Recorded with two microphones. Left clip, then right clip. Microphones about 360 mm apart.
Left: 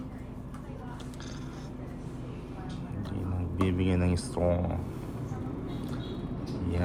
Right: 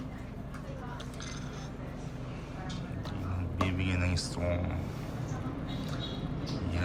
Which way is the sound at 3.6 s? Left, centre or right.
Centre.